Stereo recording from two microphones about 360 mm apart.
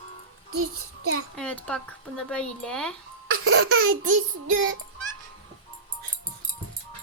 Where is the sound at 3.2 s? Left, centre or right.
Right.